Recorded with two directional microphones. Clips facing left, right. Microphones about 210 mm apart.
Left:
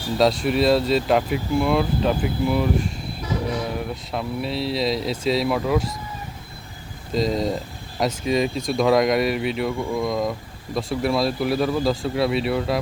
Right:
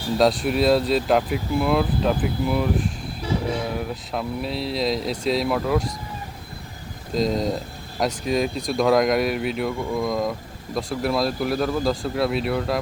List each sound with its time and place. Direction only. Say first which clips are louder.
0.2 s speech: left 1 dB; centre (ahead or behind)
7.1 s speech: even; centre (ahead or behind)